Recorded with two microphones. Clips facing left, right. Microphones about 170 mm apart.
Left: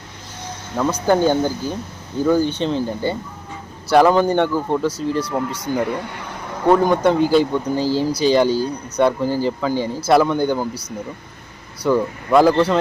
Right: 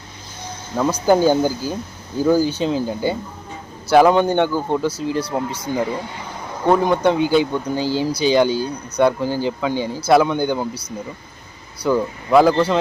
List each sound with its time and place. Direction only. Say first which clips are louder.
1.0 s speech: right 2 dB; 10° right (ahead or behind)
5.8 s speech: left 1 dB; 65° left (ahead or behind)
6.7 s speech: left 1 dB; centre (ahead or behind)